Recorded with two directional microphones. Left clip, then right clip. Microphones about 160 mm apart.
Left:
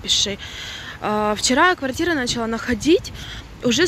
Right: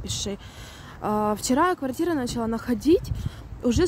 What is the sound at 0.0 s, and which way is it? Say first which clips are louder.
Speech: left 12 dB; 25° right (ahead or behind).